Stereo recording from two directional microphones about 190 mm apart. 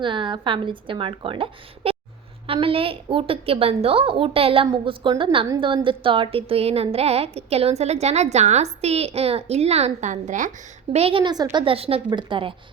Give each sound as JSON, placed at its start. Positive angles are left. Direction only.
{"t": 0.0, "sound": "a woman's voice", "side_deg": -25}
{"t": 10.9, "sound": "a woman's voice", "side_deg": -30}